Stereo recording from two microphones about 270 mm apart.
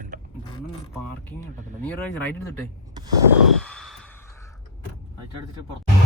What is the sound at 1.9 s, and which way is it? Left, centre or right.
Speech, centre.